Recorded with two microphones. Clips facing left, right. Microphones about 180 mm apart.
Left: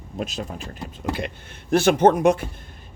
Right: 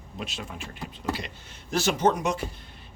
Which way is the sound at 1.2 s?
55° left (ahead or behind).